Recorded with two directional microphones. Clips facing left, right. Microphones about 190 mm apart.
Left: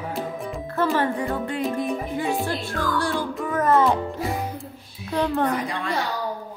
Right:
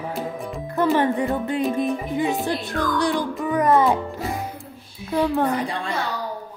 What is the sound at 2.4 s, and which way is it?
Music, 20° right (ahead or behind).